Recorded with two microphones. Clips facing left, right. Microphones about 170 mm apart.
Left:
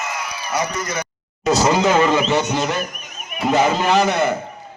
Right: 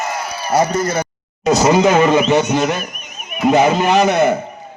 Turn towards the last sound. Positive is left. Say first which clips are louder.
# right 4 dB
turn(degrees=-15)  # may be behind; listen again after turning